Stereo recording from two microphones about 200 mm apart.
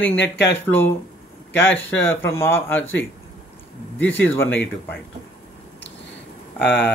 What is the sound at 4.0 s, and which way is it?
Speech, 10° left (ahead or behind).